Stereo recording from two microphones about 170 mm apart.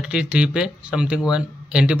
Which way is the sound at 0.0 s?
5° right (ahead or behind).